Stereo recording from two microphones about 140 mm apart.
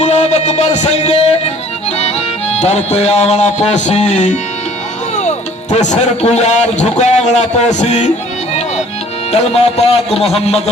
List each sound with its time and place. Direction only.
0.0 s music: 55° left (ahead or behind)
5.7 s a man's voice: 55° left (ahead or behind)
9.3 s speech: 50° left (ahead or behind)